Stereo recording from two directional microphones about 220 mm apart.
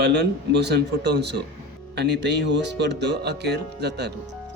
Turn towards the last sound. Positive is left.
turn(degrees=-50)  # may be behind; listen again after turning